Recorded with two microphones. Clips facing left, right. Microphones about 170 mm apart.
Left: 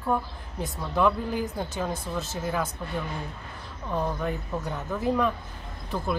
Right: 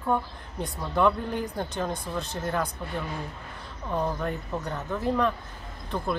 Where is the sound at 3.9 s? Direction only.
Centre (ahead or behind).